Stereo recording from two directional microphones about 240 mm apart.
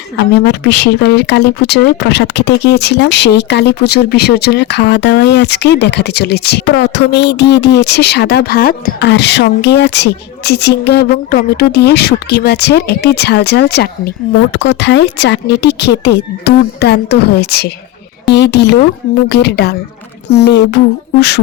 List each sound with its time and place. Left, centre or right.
0.3 s speech: left